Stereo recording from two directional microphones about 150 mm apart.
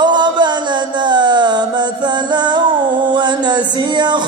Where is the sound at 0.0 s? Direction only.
30° right (ahead or behind).